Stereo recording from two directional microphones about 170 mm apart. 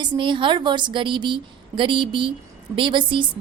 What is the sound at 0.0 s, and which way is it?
A woman's voice, 30° right (ahead or behind).